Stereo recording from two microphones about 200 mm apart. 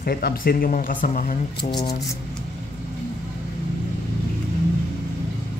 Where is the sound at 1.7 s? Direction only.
25° left (ahead or behind).